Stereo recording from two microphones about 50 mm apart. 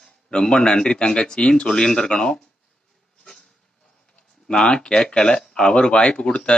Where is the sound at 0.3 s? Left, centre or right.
Centre.